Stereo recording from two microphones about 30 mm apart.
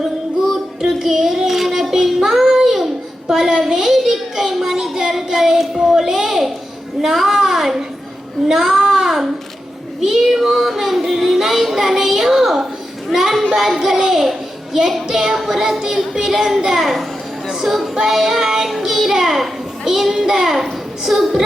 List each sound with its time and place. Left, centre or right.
0.8 s child singing: centre
3.2 s a sound: centre
8.4 s child singing: centre
13.1 s a sound: centre
15.1 s child singing: centre
16.6 s a child's voice: centre
17.5 s music: centre
18.0 s child singing: centre
18.8 s a child's voice: centre